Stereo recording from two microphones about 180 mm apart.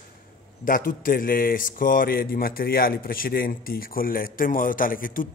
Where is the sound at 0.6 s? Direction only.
50° left (ahead or behind).